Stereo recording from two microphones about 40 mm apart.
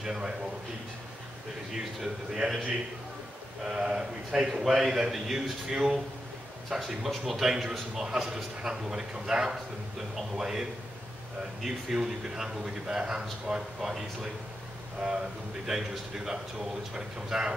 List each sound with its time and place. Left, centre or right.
0.0 s a man's voice: centre
2.3 s a man's voice: centre
3.6 s a man's voice: right; by 7.4 s centre
7.4 s a man's voice: centre
15.6 s a man's voice: centre